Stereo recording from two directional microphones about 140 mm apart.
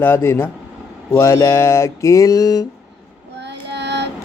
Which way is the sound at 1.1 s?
20° left (ahead or behind).